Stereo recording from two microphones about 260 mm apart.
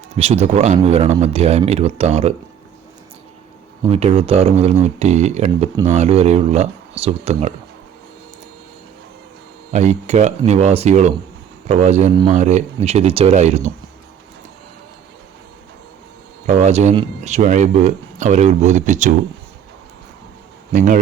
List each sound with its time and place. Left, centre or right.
0.2 s speech: right
3.8 s speech: right
9.7 s speech: right
16.5 s speech: right
20.7 s speech: right